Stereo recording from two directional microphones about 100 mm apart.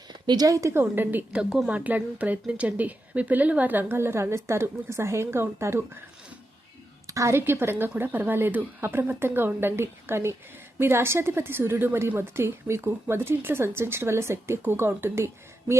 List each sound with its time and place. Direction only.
0.1 s a woman's voice: 45° right (ahead or behind); by 5.8 s 30° right (ahead or behind)
7.1 s a woman's voice: 30° right (ahead or behind)